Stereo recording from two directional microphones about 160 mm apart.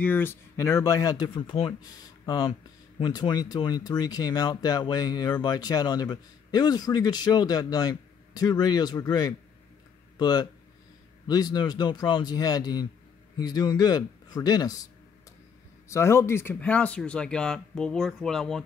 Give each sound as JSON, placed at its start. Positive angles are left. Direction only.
{"t": 0.0, "sound": "speech", "side_deg": 10}
{"t": 15.9, "sound": "speech", "side_deg": 15}